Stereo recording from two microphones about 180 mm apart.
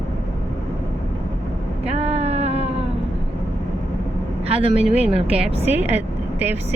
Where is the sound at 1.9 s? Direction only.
35° right (ahead or behind).